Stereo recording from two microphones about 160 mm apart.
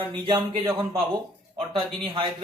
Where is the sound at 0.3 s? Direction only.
30° right (ahead or behind).